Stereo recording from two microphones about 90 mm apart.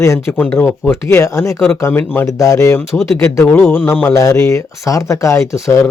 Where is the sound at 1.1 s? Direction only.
35° left (ahead or behind).